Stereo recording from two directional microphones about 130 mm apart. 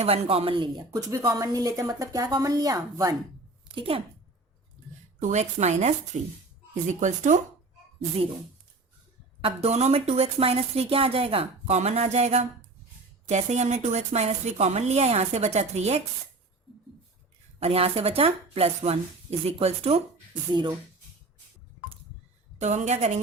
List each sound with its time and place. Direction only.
0.0 s a woman's voice: 50° right (ahead or behind)
0.9 s speech: 20° right (ahead or behind)
3.8 s a woman's voice: 45° right (ahead or behind)
5.3 s speech: 60° right (ahead or behind)
9.4 s a woman's voice: 55° right (ahead or behind)
17.6 s a woman's voice: 50° right (ahead or behind)
20.5 s speech: 35° right (ahead or behind)
22.6 s speech: 60° right (ahead or behind)